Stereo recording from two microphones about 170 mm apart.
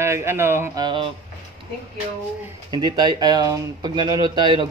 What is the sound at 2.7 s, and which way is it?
Speech, 25° right (ahead or behind).